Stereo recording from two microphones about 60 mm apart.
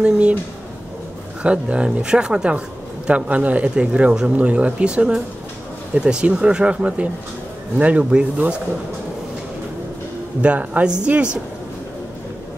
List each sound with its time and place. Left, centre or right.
0.0 s speech: centre
1.4 s speech: centre
10.4 s speech: right